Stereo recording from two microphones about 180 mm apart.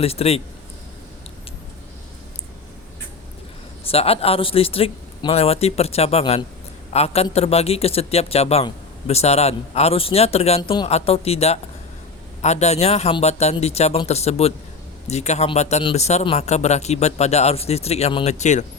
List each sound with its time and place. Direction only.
0.0 s a man's voice: 35° left (ahead or behind)
3.8 s a man's voice: 35° left (ahead or behind)
10.6 s speech: 25° left (ahead or behind)
10.8 s a man's voice: 35° left (ahead or behind)